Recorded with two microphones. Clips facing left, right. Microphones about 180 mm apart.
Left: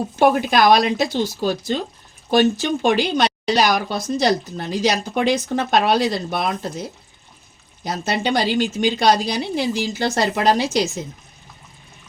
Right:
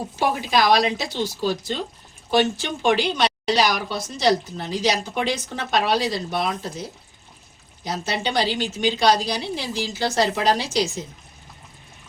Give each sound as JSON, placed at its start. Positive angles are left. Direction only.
{"t": 0.2, "sound": "speech", "side_deg": 55}
{"t": 7.9, "sound": "speech", "side_deg": 50}